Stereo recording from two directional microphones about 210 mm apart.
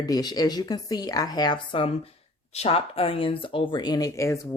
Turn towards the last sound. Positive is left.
turn(degrees=15)  # may be behind; listen again after turning